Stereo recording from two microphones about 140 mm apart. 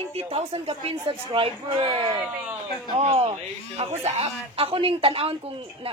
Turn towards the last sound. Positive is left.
turn(degrees=-40)  # may be behind; listen again after turning